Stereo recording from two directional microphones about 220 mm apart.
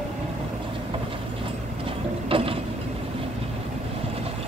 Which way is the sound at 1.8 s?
25° right (ahead or behind).